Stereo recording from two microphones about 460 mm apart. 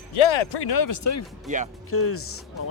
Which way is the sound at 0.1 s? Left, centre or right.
Left.